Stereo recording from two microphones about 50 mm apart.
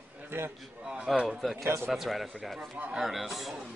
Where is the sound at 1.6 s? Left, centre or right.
Right.